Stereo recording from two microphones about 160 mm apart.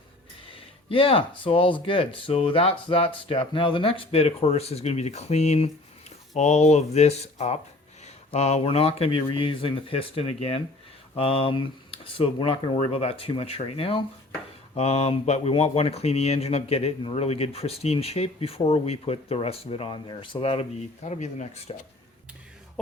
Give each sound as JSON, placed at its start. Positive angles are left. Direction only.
{"t": 0.5, "sound": "speech", "side_deg": 35}